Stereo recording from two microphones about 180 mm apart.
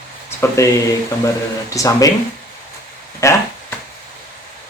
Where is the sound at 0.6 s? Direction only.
15° left (ahead or behind).